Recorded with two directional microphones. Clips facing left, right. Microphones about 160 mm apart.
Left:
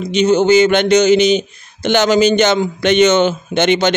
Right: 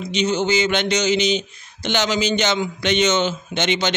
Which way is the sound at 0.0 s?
50° left (ahead or behind).